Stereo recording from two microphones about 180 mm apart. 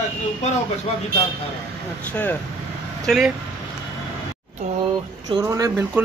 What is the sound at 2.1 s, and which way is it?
Speech, 10° left (ahead or behind).